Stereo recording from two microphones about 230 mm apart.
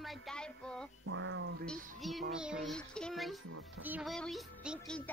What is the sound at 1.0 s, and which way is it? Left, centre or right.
Speech, right.